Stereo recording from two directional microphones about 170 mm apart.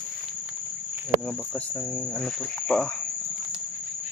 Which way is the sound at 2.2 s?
5° left (ahead or behind).